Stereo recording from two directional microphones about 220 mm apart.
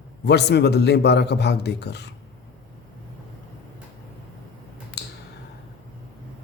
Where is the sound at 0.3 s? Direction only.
50° left (ahead or behind).